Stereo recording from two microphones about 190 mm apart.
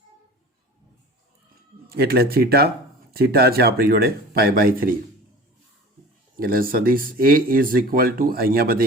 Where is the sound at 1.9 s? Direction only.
55° right (ahead or behind).